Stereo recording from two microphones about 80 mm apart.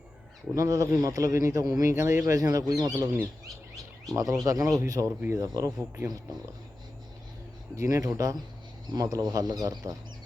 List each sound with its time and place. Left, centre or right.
0.5 s speech: right
7.8 s speech: right